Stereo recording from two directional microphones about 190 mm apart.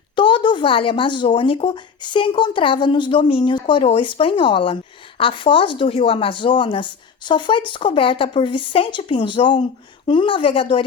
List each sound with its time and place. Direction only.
0.2 s a woman's voice: 25° left (ahead or behind)